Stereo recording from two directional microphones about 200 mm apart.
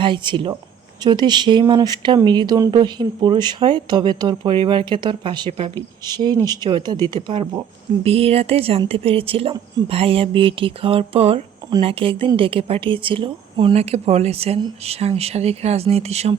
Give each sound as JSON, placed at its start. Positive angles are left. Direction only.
{"t": 0.0, "sound": "speech", "side_deg": -25}